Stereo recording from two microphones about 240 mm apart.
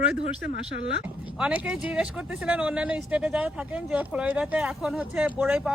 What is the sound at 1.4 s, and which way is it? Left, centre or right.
Speech, centre.